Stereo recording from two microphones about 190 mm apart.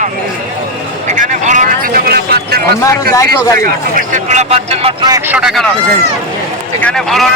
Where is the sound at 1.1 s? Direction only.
40° right (ahead or behind).